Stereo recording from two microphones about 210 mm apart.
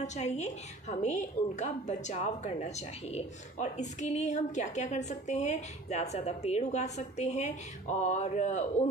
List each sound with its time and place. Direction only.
0.0 s a woman's voice: 35° left (ahead or behind)